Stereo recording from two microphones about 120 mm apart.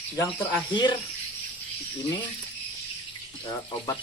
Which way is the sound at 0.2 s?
35° left (ahead or behind).